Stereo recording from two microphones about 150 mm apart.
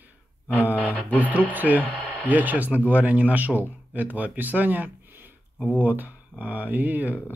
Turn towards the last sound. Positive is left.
turn(degrees=-10)  # may be behind; listen again after turning